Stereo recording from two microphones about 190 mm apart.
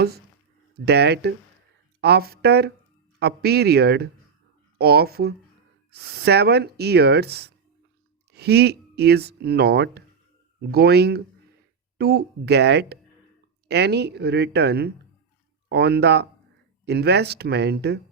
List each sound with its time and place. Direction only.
0.9 s speech: 60° right (ahead or behind)